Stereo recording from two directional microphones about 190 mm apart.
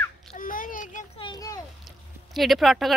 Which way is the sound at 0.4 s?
45° left (ahead or behind).